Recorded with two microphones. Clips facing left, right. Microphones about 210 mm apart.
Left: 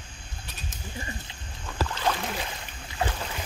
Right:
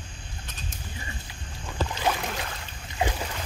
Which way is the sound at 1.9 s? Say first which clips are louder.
Right 1 dB; 15° right (ahead or behind).